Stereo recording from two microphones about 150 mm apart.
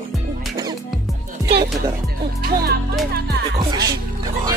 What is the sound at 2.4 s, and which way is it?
Speech, 90° right.